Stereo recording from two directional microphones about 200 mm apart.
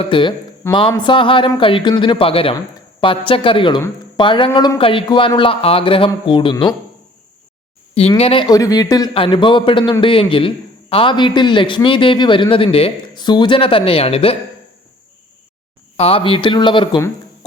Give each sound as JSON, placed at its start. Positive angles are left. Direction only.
{"t": 0.0, "sound": "a man's voice", "side_deg": 25}
{"t": 8.2, "sound": "a man's voice", "side_deg": 25}
{"t": 16.0, "sound": "a man's voice", "side_deg": 30}